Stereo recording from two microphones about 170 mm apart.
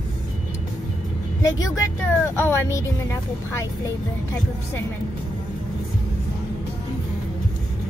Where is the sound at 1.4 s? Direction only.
20° left (ahead or behind).